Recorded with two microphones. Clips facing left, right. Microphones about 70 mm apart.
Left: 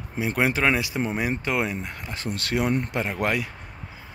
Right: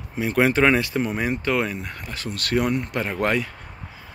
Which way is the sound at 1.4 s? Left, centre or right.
Centre.